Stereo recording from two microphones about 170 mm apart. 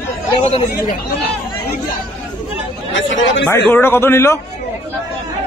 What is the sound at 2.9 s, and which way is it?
Speech, 90° left.